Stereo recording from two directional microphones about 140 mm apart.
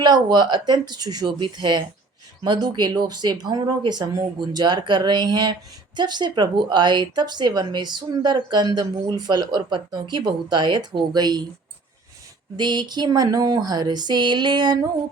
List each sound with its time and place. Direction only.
0.0 s speech: 30° right (ahead or behind)
12.5 s speech: 30° right (ahead or behind)